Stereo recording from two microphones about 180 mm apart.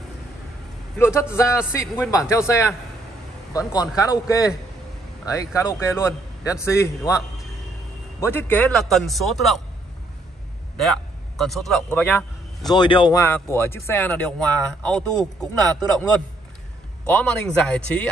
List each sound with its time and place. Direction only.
0.9 s speech: 15° left (ahead or behind)
3.9 s a man's voice: 20° left (ahead or behind)
8.2 s a man's voice: 10° left (ahead or behind)
10.8 s a man's voice: centre (ahead or behind)
12.6 s a man's voice: 25° left (ahead or behind)
13.2 s speech: 15° left (ahead or behind)
17.1 s a man's voice: 5° left (ahead or behind)